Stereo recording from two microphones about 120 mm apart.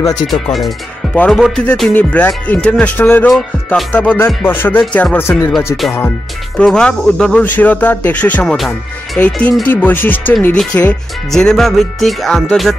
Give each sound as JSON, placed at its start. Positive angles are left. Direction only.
{"t": 0.3, "sound": "speech", "side_deg": 0}
{"t": 3.3, "sound": "speech", "side_deg": 0}
{"t": 4.0, "sound": "speech", "side_deg": 15}
{"t": 6.5, "sound": "speech", "side_deg": 5}
{"t": 8.5, "sound": "speech", "side_deg": 0}